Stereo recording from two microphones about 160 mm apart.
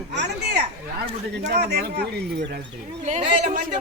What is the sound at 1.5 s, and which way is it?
Speech, 90° right.